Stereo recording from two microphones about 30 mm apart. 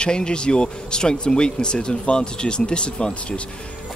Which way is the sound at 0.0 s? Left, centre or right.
Left.